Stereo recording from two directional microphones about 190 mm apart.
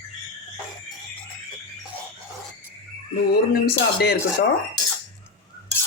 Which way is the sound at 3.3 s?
55° left (ahead or behind).